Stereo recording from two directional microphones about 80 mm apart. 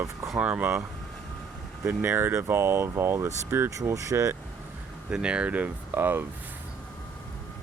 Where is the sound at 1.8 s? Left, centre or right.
Right.